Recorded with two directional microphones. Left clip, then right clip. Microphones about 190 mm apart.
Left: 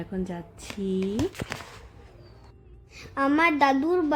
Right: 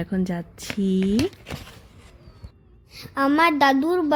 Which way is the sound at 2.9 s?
25° right (ahead or behind).